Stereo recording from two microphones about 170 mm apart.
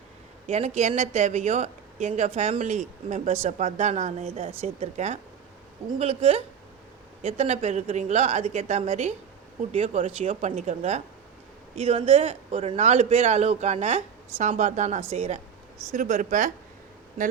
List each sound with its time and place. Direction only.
0.4 s speech: 40° right (ahead or behind)